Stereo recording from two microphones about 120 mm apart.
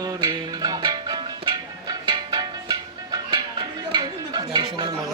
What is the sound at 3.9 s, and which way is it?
Dishes, 35° right (ahead or behind).